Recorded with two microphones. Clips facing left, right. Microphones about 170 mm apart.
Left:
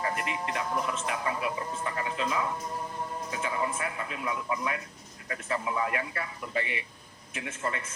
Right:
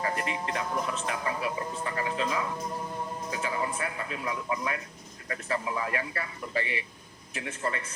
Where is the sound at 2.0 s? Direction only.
30° right (ahead or behind).